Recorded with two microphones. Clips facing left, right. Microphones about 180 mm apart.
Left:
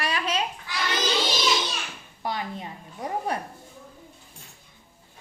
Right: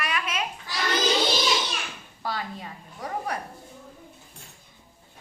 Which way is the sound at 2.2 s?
20° left (ahead or behind).